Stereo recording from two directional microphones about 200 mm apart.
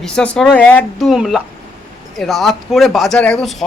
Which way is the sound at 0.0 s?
5° left (ahead or behind).